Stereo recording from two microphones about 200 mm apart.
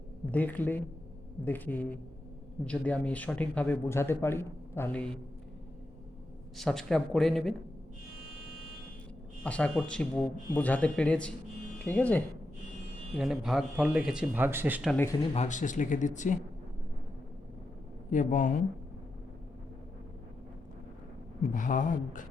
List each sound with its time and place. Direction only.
0.3 s speech: 10° left (ahead or behind)
6.6 s a man's voice: centre (ahead or behind)
9.4 s a man's voice: 5° left (ahead or behind)
15.3 s speech: 35° left (ahead or behind)
18.1 s speech: 40° left (ahead or behind)
21.5 s speech: 40° left (ahead or behind)